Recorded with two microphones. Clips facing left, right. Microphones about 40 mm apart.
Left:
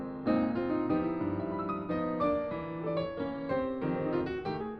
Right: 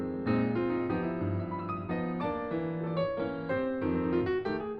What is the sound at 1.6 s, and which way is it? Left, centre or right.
Music, centre.